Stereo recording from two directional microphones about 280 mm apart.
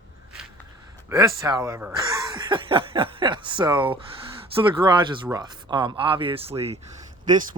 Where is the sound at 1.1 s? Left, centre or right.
Centre.